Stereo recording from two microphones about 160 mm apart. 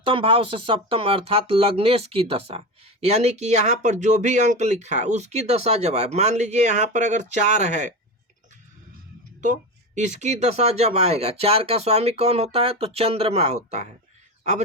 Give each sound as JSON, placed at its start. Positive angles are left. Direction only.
{"t": 0.0, "sound": "speech", "side_deg": -35}
{"t": 9.4, "sound": "speech", "side_deg": -50}